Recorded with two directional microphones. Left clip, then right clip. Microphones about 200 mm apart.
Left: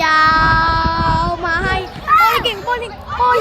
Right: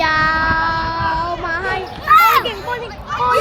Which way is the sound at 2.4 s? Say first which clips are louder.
Left 4 dB; 50° left (ahead or behind).